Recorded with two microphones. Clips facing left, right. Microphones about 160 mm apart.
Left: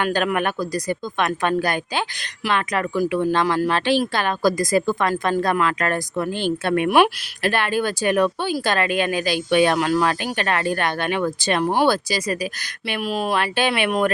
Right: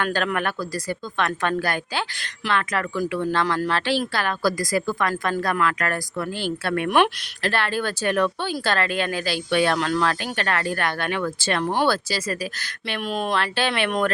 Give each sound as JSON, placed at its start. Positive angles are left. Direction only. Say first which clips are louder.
{"t": 0.0, "sound": "speech", "louder": "left 3 dB", "side_deg": 15}